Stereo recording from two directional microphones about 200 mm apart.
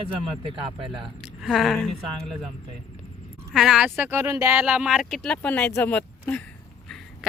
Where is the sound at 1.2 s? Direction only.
Centre (ahead or behind).